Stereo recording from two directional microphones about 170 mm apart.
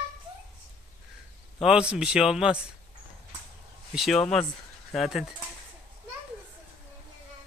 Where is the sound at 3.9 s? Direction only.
Centre (ahead or behind).